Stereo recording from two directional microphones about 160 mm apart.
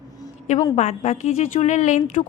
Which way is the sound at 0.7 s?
45° left (ahead or behind).